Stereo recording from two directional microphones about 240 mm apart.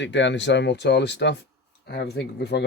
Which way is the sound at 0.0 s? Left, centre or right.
Left.